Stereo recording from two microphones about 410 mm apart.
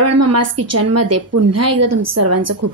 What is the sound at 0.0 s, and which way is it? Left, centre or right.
Speech, right.